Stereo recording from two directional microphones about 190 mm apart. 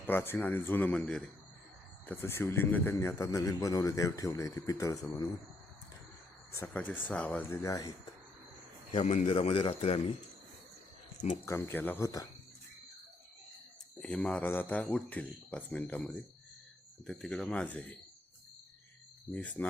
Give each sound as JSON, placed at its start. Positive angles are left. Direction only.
{"t": 0.1, "sound": "a man's voice", "side_deg": 10}
{"t": 6.5, "sound": "a man's voice", "side_deg": 10}
{"t": 8.9, "sound": "speech", "side_deg": 35}
{"t": 11.4, "sound": "a man's voice", "side_deg": 10}
{"t": 14.0, "sound": "a man's voice", "side_deg": 5}
{"t": 19.3, "sound": "a man's voice", "side_deg": 10}